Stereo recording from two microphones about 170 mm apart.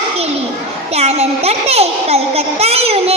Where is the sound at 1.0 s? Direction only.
35° right (ahead or behind).